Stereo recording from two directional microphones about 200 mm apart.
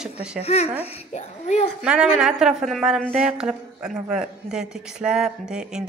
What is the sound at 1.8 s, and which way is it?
Speech, 5° right (ahead or behind).